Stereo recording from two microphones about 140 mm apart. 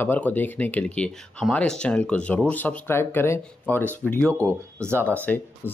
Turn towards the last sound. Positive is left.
turn(degrees=10)  # may be behind; listen again after turning